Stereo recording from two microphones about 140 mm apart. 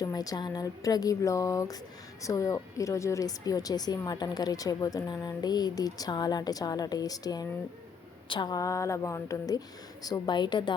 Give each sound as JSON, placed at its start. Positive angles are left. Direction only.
{"t": 0.0, "sound": "a woman's voice", "side_deg": 25}